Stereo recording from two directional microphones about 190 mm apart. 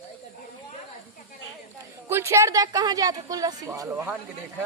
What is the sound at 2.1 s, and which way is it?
A woman's voice, 15° right (ahead or behind).